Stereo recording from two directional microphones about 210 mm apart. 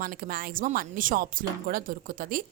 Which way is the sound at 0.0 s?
45° right (ahead or behind).